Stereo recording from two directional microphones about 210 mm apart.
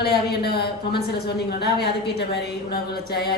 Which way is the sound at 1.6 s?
50° left (ahead or behind).